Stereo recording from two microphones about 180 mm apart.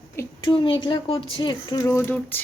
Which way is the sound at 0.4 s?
25° left (ahead or behind).